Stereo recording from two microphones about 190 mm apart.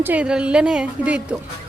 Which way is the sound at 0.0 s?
5° right (ahead or behind).